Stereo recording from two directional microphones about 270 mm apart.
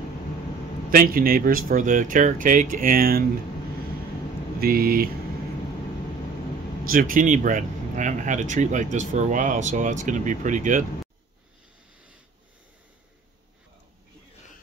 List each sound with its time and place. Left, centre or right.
0.8 s speech: right
4.6 s speech: right
6.8 s speech: right